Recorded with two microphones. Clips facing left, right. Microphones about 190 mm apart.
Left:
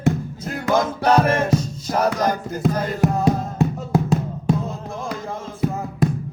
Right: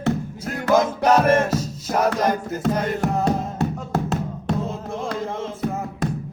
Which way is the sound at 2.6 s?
10° left (ahead or behind).